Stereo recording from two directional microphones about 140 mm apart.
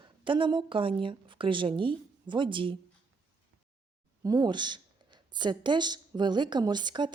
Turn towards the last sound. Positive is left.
turn(degrees=-30)  # may be behind; listen again after turning